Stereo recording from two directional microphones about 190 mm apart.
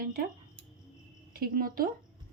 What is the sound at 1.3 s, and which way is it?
Speech, 50° right (ahead or behind).